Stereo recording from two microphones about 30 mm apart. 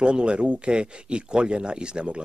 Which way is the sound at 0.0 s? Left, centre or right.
Right.